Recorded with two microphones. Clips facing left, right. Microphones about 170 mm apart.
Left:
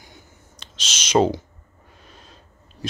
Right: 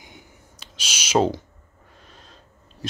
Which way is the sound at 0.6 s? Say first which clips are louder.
Even; 10° right (ahead or behind).